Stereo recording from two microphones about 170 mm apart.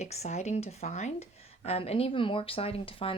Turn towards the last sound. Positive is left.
turn(degrees=35)  # may be behind; listen again after turning